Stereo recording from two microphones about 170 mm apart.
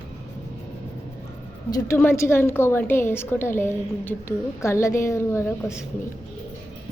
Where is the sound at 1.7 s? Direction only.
15° left (ahead or behind).